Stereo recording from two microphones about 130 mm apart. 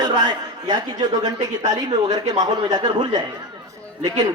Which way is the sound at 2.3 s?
30° right (ahead or behind).